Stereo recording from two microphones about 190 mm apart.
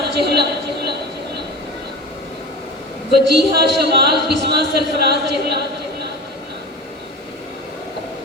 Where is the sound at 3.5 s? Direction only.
60° right (ahead or behind).